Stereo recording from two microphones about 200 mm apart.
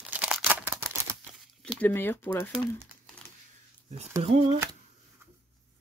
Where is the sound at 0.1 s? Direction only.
5° right (ahead or behind).